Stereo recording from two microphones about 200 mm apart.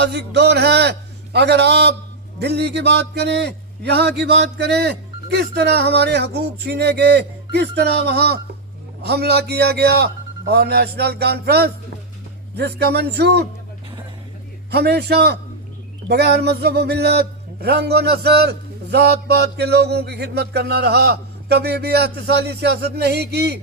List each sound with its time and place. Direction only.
0.0 s a man's voice: 55° right (ahead or behind)
14.7 s a man's voice: 55° right (ahead or behind)